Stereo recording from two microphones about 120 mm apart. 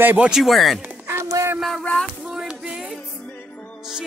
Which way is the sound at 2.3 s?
5° right (ahead or behind).